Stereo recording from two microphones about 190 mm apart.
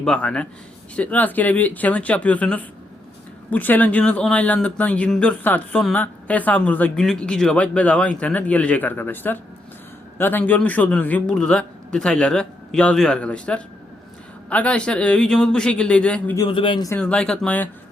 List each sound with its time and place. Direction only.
0.0 s a man's voice: 5° left (ahead or behind)
16.5 s speech: 25° left (ahead or behind)
16.9 s a man's voice: 5° left (ahead or behind)